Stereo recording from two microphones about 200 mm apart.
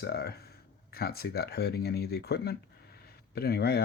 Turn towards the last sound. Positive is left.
turn(degrees=55)  # may be behind; listen again after turning